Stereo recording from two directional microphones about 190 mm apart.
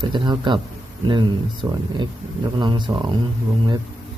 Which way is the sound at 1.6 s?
15° right (ahead or behind).